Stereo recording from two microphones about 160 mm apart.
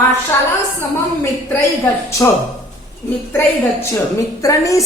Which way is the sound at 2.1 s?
20° left (ahead or behind).